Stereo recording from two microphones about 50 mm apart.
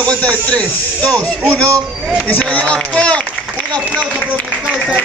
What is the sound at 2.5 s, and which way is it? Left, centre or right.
Speech, centre.